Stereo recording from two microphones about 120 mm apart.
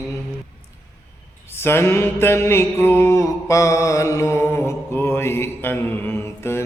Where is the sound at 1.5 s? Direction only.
20° left (ahead or behind).